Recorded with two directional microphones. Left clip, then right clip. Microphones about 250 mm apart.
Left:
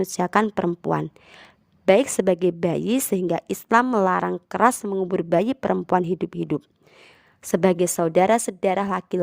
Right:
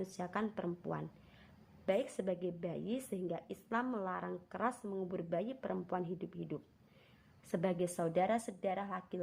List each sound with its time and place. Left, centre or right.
0.0 s a woman's voice: left